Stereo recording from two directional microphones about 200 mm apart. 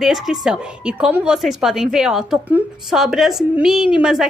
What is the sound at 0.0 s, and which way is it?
A woman's voice, centre (ahead or behind).